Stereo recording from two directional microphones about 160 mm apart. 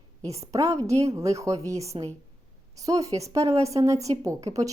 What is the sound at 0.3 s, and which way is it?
Speech, 20° right (ahead or behind).